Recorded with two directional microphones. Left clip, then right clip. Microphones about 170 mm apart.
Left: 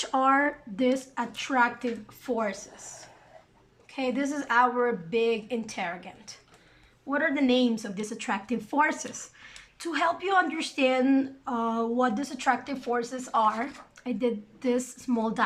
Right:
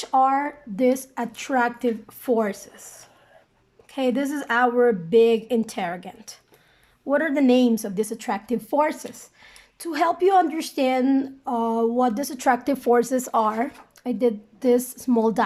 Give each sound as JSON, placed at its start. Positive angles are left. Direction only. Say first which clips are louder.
{"t": 0.0, "sound": "a woman's voice", "louder": "right 4 dB", "side_deg": -25}
{"t": 3.9, "sound": "a woman's voice", "louder": "right 5 dB", "side_deg": -45}